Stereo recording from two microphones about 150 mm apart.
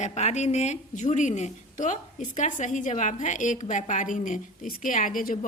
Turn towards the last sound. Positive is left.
turn(degrees=65)  # may be behind; listen again after turning